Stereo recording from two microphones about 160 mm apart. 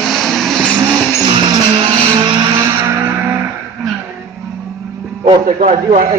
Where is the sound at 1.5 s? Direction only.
30° right (ahead or behind).